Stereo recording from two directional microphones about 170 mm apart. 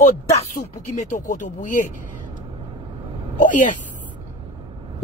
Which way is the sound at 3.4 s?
50° left (ahead or behind).